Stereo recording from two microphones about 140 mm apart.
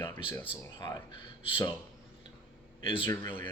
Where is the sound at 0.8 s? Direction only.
25° left (ahead or behind).